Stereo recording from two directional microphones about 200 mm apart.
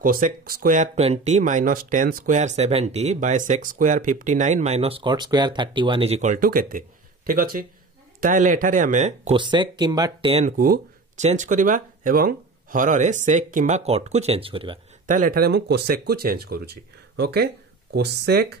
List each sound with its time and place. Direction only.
0.0 s speech: 45° right (ahead or behind); by 10.4 s 25° right (ahead or behind)
10.4 s speech: 40° right (ahead or behind); by 14.8 s 25° right (ahead or behind)
15.0 s speech: 45° right (ahead or behind)